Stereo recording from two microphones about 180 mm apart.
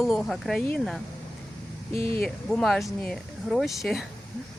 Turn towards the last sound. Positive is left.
turn(degrees=0)  # may be behind; listen again after turning